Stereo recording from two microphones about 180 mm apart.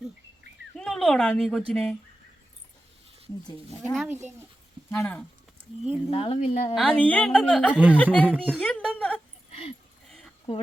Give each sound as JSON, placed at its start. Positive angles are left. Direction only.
{"t": 0.8, "sound": "speech", "side_deg": 0}
{"t": 3.9, "sound": "speech", "side_deg": -5}
{"t": 4.9, "sound": "a woman's voice", "side_deg": 10}
{"t": 5.9, "sound": "a woman's voice", "side_deg": 30}
{"t": 6.7, "sound": "a woman's voice", "side_deg": 5}
{"t": 8.4, "sound": "a sound", "side_deg": 0}
{"t": 9.5, "sound": "dog", "side_deg": 35}
{"t": 10.1, "sound": "a sound", "side_deg": 0}